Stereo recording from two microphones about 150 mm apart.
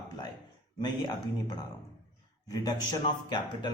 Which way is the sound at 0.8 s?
25° left (ahead or behind).